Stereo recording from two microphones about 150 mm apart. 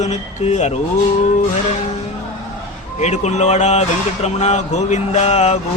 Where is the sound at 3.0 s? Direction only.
50° left (ahead or behind).